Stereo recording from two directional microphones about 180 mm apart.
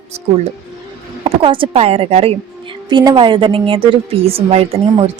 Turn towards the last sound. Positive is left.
turn(degrees=-35)  # may be behind; listen again after turning